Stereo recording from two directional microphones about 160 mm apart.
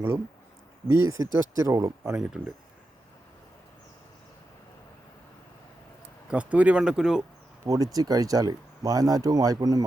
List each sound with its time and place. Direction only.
0.9 s speech: 20° right (ahead or behind)
2.1 s speech: 10° right (ahead or behind)
6.2 s speech: 10° right (ahead or behind)
7.6 s speech: 20° right (ahead or behind)